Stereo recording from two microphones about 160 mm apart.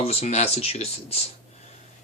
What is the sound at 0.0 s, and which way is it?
Speech, 40° left (ahead or behind).